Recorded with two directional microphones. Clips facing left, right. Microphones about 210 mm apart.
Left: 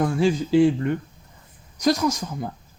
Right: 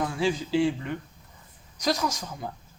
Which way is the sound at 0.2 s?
50° left (ahead or behind).